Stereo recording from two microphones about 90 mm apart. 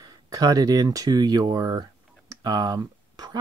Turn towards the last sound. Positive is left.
turn(degrees=-50)  # may be behind; listen again after turning